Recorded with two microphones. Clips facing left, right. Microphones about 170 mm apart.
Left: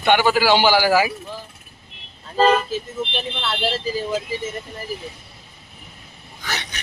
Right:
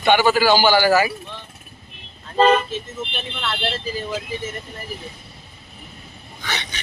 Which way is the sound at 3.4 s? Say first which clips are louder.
Even; 5° left (ahead or behind).